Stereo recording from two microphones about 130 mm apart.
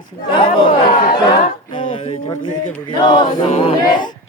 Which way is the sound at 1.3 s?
30° left (ahead or behind).